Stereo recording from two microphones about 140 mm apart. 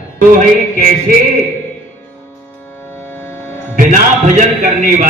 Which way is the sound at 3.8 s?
65° right (ahead or behind).